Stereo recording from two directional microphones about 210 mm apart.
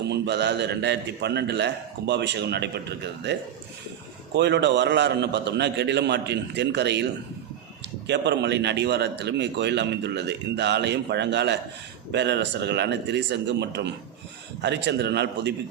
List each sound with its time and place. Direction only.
0.1 s a man's voice: 55° right (ahead or behind)